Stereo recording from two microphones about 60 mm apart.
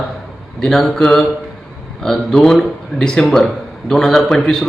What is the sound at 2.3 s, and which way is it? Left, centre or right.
A man's voice, centre.